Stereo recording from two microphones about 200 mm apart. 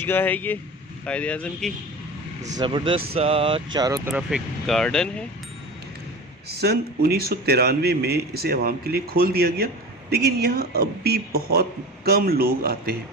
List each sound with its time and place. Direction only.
0.0 s speech: 10° left (ahead or behind)
2.6 s speech: 25° right (ahead or behind)
4.1 s speech: centre (ahead or behind)
6.6 s speech: 55° right (ahead or behind)